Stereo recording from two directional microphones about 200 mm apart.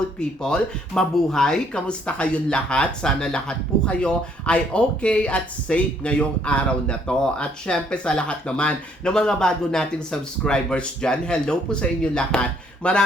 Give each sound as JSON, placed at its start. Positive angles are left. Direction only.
{"t": 0.2, "sound": "speech", "side_deg": 5}